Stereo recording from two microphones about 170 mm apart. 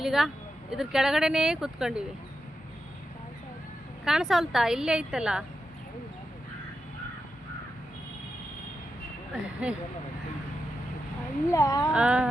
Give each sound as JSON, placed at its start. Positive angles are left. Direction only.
{"t": 0.0, "sound": "a woman's voice", "side_deg": 0}
{"t": 4.0, "sound": "a woman's voice", "side_deg": 0}
{"t": 9.3, "sound": "speech", "side_deg": -5}
{"t": 11.5, "sound": "speech", "side_deg": 20}
{"t": 11.9, "sound": "a sound", "side_deg": -5}